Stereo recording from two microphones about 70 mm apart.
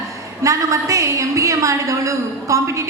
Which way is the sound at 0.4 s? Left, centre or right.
Right.